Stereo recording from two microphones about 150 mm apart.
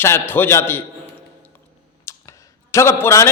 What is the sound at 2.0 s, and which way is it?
Clicking, 20° left (ahead or behind).